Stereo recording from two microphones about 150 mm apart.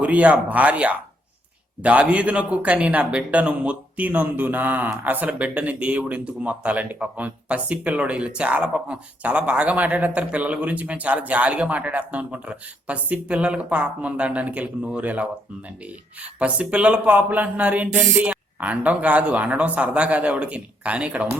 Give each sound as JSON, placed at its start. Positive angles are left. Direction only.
{"t": 0.0, "sound": "a man's voice", "side_deg": -10}